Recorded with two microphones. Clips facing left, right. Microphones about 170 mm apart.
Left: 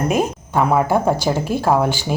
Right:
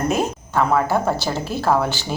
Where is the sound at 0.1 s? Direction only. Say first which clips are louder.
Left 2 dB; 15° left (ahead or behind).